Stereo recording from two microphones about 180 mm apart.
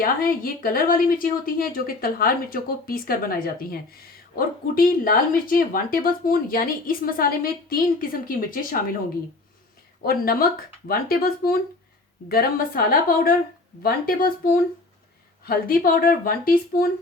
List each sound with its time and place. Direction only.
0.0 s speech: 55° left (ahead or behind)
10.0 s speech: 55° left (ahead or behind)